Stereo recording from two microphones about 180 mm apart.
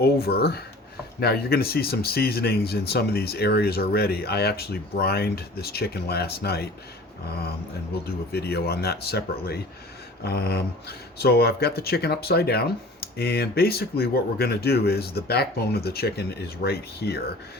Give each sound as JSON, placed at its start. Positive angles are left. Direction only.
{"t": 0.0, "sound": "speech", "side_deg": 60}
{"t": 8.0, "sound": "speech", "side_deg": 60}